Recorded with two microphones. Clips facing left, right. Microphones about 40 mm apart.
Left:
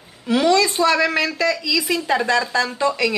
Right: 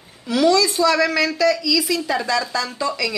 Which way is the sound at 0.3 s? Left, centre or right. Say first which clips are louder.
Even; left.